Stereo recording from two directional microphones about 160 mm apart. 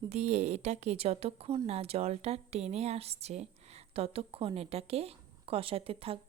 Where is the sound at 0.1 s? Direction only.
45° right (ahead or behind).